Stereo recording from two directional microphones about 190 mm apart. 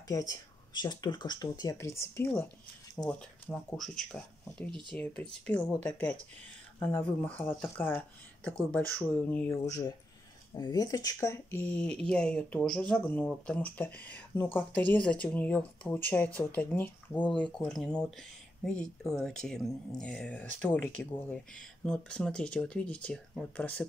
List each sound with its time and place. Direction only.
0.1 s speech: 20° left (ahead or behind)